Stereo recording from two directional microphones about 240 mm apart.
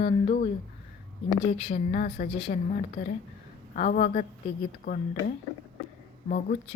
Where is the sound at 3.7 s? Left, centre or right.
Left.